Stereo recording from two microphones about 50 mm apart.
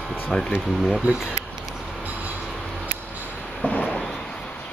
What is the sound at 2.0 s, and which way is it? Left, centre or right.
Train, right.